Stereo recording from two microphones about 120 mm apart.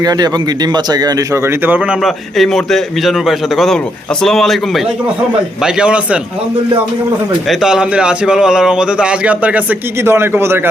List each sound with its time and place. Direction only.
0.0 s speech: 35° right (ahead or behind)
1.6 s speech: 15° right (ahead or behind)
2.0 s a man's voice: centre (ahead or behind)
5.6 s speech: 10° right (ahead or behind)
7.6 s a man's voice: 5° right (ahead or behind)